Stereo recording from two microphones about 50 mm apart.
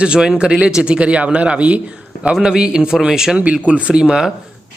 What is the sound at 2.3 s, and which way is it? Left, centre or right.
Speech, centre.